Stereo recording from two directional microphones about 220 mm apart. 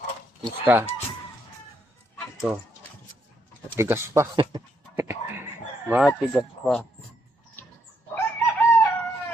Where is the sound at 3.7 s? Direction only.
10° right (ahead or behind).